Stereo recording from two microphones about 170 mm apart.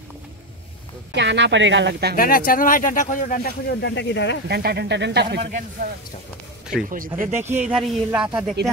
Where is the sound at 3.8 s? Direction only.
90° left.